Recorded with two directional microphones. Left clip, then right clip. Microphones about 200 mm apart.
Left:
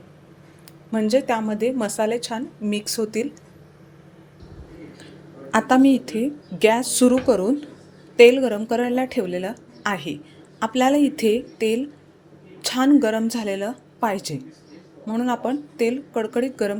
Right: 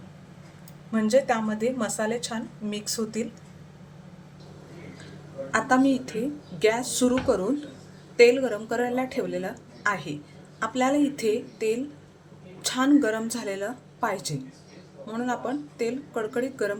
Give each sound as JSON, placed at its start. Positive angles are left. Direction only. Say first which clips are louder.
{"t": 0.9, "sound": "a woman's voice", "louder": "left 2 dB", "side_deg": 35}
{"t": 5.5, "sound": "a woman's voice", "louder": "left 5 dB", "side_deg": 35}